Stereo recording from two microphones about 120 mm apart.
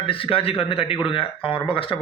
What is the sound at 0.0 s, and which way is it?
A man's voice, 50° left (ahead or behind).